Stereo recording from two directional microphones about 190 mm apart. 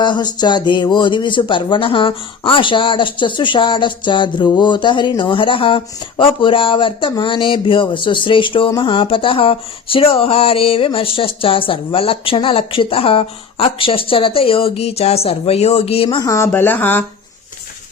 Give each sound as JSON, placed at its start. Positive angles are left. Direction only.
{"t": 0.0, "sound": "speech", "side_deg": 25}